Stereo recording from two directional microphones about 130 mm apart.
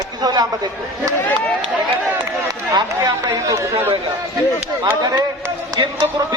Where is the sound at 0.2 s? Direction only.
30° right (ahead or behind).